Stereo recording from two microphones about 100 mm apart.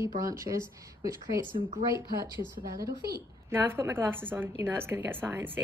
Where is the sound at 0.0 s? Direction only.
35° right (ahead or behind).